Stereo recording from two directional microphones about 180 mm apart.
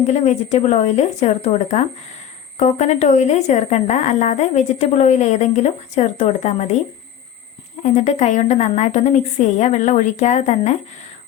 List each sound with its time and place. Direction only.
0.1 s speech: 40° left (ahead or behind)
7.8 s speech: 40° left (ahead or behind)